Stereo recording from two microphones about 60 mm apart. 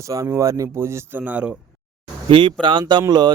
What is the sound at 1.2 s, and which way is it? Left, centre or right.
Speech, right.